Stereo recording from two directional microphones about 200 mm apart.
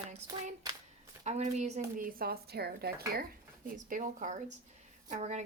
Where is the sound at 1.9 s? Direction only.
45° right (ahead or behind).